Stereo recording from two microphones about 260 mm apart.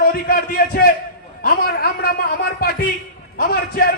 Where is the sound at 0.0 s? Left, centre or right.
Left.